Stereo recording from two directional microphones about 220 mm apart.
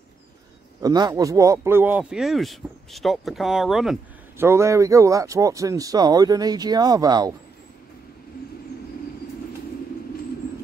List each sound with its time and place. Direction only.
0.8 s speech: 15° right (ahead or behind); by 4.5 s centre (ahead or behind)
4.5 s speech: 15° right (ahead or behind)